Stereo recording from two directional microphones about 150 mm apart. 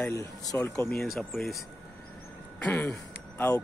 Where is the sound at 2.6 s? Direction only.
15° left (ahead or behind).